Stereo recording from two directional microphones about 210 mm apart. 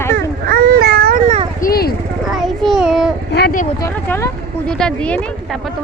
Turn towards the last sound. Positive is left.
turn(degrees=5)  # may be behind; listen again after turning